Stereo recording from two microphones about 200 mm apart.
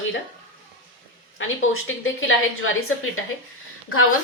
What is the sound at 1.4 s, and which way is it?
A woman's voice, 85° left.